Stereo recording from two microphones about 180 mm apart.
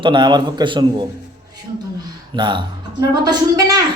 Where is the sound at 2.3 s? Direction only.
25° right (ahead or behind).